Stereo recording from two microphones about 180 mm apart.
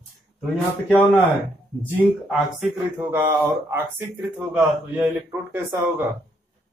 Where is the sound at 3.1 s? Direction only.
10° right (ahead or behind).